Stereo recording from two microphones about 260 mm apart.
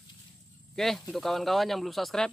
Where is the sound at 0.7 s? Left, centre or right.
Centre.